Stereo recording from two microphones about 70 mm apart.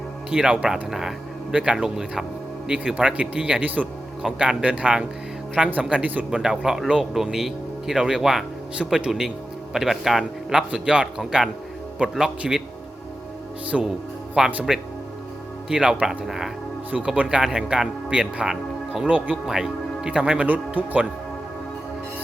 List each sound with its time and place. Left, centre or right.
0.3 s speech: centre
0.9 s a sound: centre
1.5 s speech: centre
6.3 s speech: centre
13.7 s speech: centre
15.7 s speech: centre
19.5 s speech: centre